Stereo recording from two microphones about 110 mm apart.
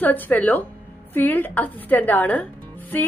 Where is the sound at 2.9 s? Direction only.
20° left (ahead or behind).